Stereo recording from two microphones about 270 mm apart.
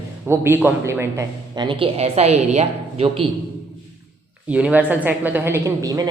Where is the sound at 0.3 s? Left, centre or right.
Centre.